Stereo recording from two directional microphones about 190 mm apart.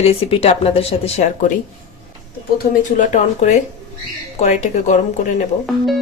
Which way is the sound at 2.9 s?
40° left (ahead or behind).